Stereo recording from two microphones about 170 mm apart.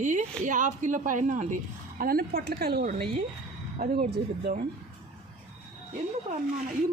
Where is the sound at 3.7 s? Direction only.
45° right (ahead or behind).